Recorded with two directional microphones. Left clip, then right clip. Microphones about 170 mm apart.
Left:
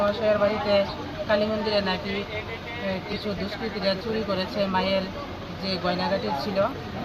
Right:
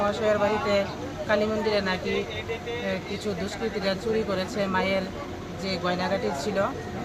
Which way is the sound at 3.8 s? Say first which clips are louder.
Even; 15° right (ahead or behind).